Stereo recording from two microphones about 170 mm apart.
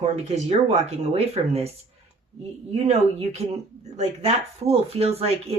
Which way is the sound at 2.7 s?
40° right (ahead or behind).